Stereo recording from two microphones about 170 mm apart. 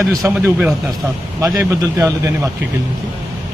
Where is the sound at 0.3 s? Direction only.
10° right (ahead or behind).